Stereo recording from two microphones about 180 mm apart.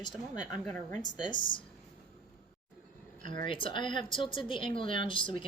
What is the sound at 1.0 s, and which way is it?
Speech, 25° left (ahead or behind).